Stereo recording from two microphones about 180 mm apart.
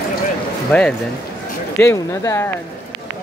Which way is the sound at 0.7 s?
10° left (ahead or behind).